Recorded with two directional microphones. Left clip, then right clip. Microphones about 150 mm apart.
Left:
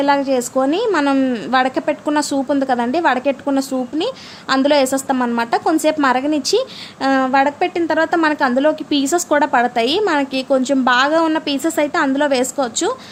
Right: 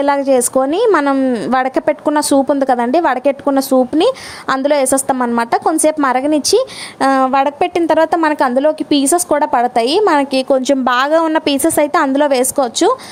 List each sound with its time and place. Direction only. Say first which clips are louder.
0.0 s a woman's voice: right 3 dB; 50° right (ahead or behind)
1.0 s speech: right 3 dB; 35° right (ahead or behind)
1.5 s a woman's voice: right 1 dB; 45° right (ahead or behind)
5.1 s a woman's voice: right 3 dB; 35° right (ahead or behind)